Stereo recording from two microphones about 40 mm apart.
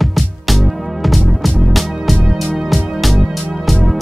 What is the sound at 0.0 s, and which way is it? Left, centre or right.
Music, centre.